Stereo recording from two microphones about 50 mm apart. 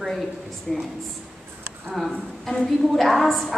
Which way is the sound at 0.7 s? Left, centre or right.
Centre.